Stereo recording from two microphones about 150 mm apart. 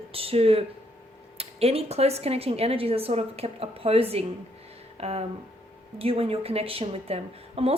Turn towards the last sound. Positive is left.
turn(degrees=-40)  # may be behind; listen again after turning